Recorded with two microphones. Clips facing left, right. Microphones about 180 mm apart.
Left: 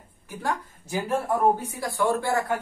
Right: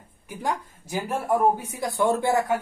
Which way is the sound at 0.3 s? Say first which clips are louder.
Right 1 dB; 15° right (ahead or behind).